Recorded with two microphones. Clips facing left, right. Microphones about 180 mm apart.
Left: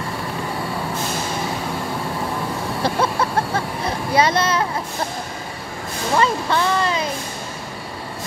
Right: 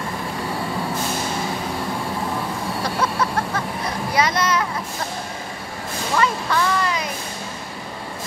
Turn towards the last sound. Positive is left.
turn(degrees=30)  # may be behind; listen again after turning